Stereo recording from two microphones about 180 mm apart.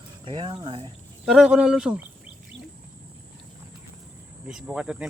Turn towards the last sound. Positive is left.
turn(degrees=-5)  # may be behind; listen again after turning